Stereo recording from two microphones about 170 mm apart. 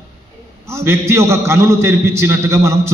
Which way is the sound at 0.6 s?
15° right (ahead or behind).